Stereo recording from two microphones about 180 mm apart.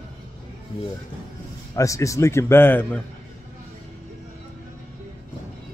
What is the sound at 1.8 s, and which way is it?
Speech, 15° left (ahead or behind).